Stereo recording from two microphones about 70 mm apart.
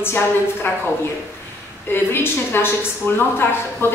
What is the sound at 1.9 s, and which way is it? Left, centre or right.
A woman's voice, left.